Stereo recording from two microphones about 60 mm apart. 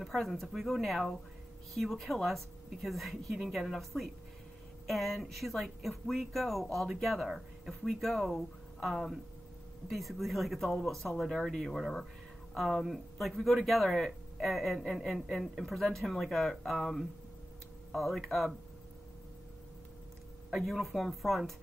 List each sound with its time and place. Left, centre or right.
0.0 s speech: centre
20.5 s speech: centre